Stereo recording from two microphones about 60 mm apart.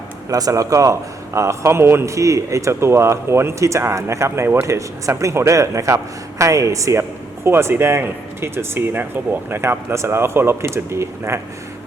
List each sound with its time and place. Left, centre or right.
0.3 s speech: right
1.3 s speech: right
2.0 s speech: right
7.4 s speech: right